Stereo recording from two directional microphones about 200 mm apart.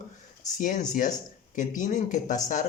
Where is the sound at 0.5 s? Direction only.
40° left (ahead or behind).